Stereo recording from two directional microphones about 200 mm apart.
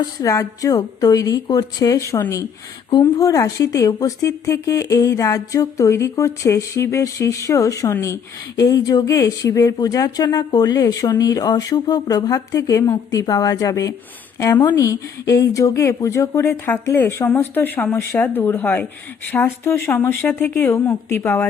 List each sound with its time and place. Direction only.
0.2 s speech: 15° left (ahead or behind)